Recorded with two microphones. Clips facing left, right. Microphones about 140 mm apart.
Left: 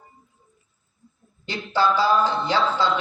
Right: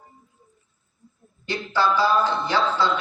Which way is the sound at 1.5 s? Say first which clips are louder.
Left 1 dB; 15° left (ahead or behind).